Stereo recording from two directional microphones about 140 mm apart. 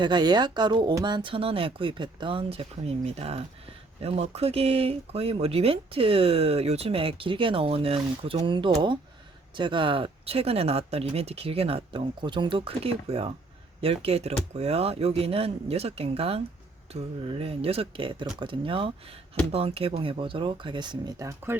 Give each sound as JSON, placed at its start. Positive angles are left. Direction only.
{"t": 0.0, "sound": "speech", "side_deg": -30}